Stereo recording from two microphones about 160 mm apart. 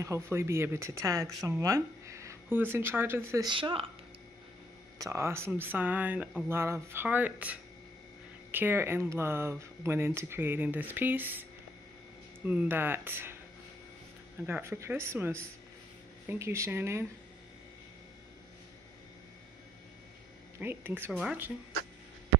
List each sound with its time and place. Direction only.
0.0 s speech: 15° right (ahead or behind)
3.4 s speech: 30° right (ahead or behind)
4.9 s speech: 20° right (ahead or behind)
12.4 s speech: 10° right (ahead or behind)
14.4 s speech: 15° right (ahead or behind)
20.5 s speech: 15° right (ahead or behind)